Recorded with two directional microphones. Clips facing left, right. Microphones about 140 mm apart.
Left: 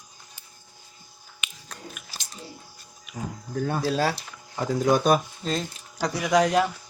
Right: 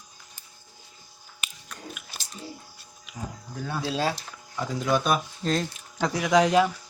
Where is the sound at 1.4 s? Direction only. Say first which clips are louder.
Even; 35° right (ahead or behind).